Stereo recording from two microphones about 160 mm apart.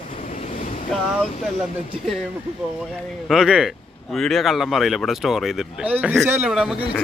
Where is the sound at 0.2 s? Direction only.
50° left (ahead or behind).